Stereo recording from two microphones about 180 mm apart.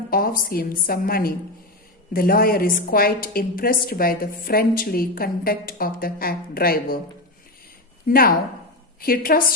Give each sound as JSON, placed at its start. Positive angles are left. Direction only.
{"t": 0.1, "sound": "a woman's voice", "side_deg": 55}
{"t": 8.0, "sound": "a woman's voice", "side_deg": 55}